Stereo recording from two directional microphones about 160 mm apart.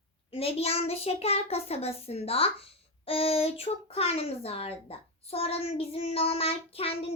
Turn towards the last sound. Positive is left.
turn(degrees=35)  # may be behind; listen again after turning